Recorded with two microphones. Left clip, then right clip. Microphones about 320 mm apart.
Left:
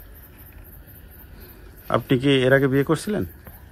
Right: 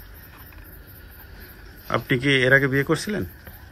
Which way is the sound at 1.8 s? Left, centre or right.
Centre.